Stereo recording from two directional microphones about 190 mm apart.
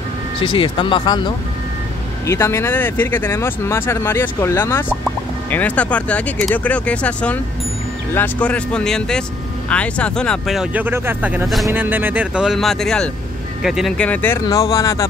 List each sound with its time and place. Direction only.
0.4 s speech: 25° left (ahead or behind); by 11.4 s 10° right (ahead or behind)
11.4 s speech: centre (ahead or behind); by 15.0 s 20° left (ahead or behind)